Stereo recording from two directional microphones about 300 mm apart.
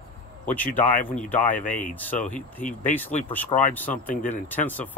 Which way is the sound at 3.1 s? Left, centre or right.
Left.